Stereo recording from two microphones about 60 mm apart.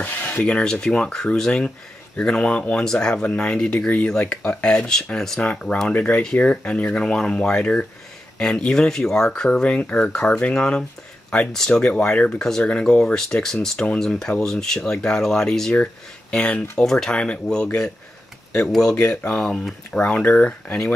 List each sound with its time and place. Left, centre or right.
0.0 s speech: left; by 5.4 s centre
5.4 s speech: left
9.6 s speech: left
18.7 s speech: centre
20.1 s speech: left